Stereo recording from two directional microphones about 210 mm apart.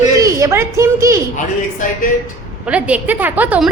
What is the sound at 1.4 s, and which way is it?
Speech, 40° left (ahead or behind).